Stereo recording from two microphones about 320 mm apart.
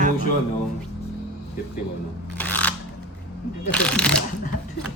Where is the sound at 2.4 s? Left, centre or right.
Centre.